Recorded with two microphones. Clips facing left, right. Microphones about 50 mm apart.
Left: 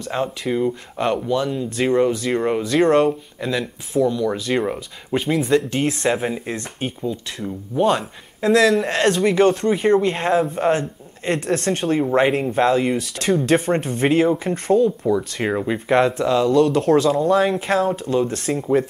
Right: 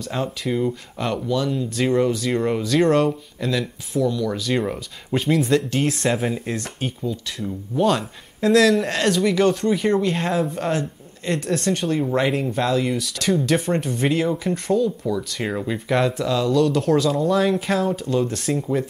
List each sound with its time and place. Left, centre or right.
0.1 s speech: left
0.5 s speech: centre
0.9 s speech: left
9.0 s speech: left
12.9 s speech: left
18.5 s speech: centre